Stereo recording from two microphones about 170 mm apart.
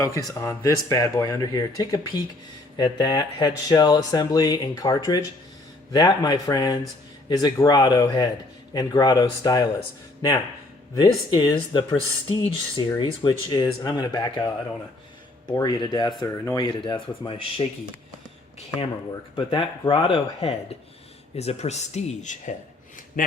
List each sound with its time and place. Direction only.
0.3 s speech: 20° left (ahead or behind)
10.9 s speech: 25° left (ahead or behind)
19.4 s speech: 30° left (ahead or behind); by 23.3 s 55° left (ahead or behind)